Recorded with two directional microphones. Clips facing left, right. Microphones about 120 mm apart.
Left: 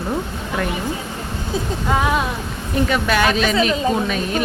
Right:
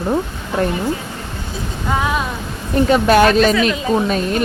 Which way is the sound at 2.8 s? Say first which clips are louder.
Right 7 dB; 40° right (ahead or behind).